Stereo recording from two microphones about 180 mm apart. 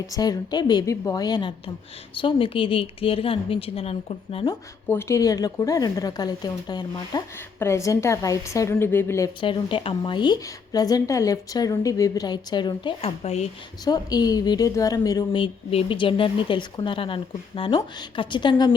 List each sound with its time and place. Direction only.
0.1 s a woman's voice: 20° left (ahead or behind)
4.9 s speech: 15° left (ahead or behind); by 13.5 s 35° left (ahead or behind)
13.8 s speech: 20° left (ahead or behind)